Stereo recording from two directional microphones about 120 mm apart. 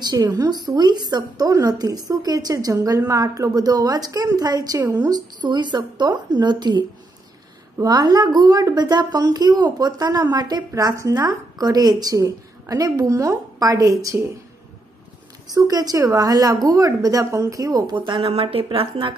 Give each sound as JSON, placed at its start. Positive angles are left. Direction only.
{"t": 0.0, "sound": "a woman's voice", "side_deg": -35}
{"t": 15.5, "sound": "a woman's voice", "side_deg": -30}
{"t": 17.9, "sound": "speech", "side_deg": -45}